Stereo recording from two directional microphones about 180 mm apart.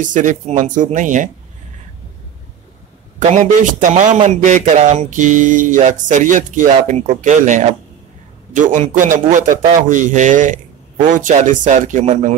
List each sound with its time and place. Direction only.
0.0 s a man's voice: 45° right (ahead or behind)
3.2 s a man's voice: 45° right (ahead or behind)